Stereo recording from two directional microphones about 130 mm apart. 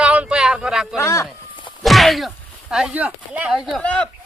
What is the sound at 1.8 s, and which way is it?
Speech, centre (ahead or behind).